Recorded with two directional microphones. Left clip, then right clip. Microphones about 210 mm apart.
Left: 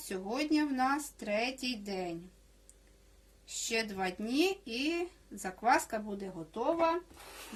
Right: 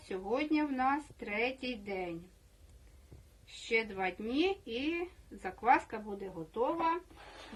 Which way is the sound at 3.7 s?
55° left (ahead or behind).